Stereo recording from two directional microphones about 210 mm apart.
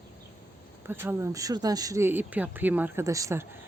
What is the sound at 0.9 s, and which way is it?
Speech, 10° right (ahead or behind).